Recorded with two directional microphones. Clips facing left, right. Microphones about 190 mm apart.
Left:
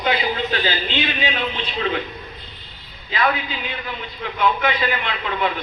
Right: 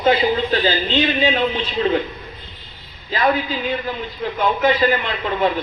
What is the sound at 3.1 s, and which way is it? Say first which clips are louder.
A man's voice: right 3 dB; 40° right (ahead or behind).